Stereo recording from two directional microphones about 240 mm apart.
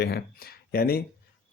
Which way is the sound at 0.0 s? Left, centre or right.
Left.